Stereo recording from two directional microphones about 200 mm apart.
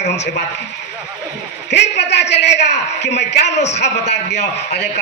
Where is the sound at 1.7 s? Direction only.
60° left (ahead or behind).